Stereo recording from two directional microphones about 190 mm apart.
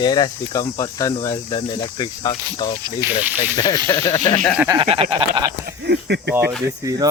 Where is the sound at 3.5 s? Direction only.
20° left (ahead or behind).